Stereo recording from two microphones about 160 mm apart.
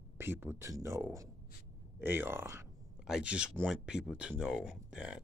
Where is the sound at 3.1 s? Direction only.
5° right (ahead or behind).